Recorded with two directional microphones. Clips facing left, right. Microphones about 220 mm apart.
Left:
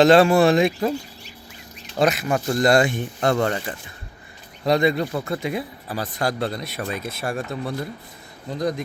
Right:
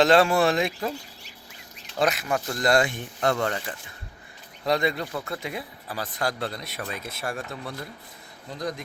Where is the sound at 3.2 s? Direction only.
35° left (ahead or behind).